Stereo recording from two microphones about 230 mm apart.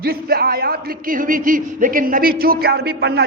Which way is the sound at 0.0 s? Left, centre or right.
Right.